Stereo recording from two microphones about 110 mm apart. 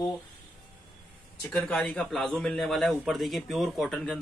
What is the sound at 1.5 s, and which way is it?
A man's voice, 10° left (ahead or behind).